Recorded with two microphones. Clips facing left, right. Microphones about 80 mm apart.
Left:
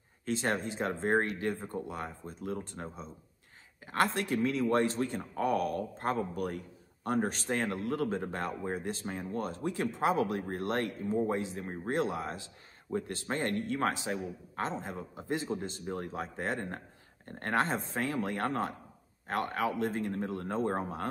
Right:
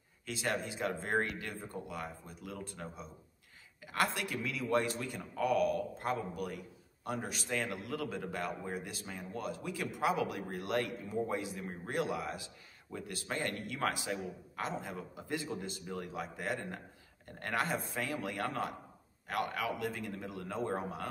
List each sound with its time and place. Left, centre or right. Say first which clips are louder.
0.2 s a man's voice: left 4 dB; left